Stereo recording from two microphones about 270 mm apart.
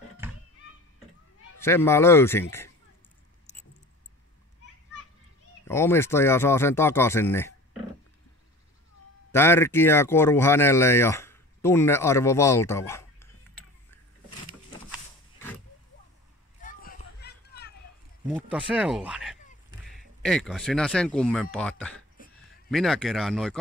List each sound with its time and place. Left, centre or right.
0.2 s a sound: centre
1.6 s speech: centre
3.5 s keys jangling: left
5.7 s speech: centre
9.3 s speech: centre
16.6 s a sound: left
18.3 s speech: centre